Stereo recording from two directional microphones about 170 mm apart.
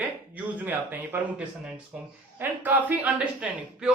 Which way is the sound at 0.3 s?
10° right (ahead or behind).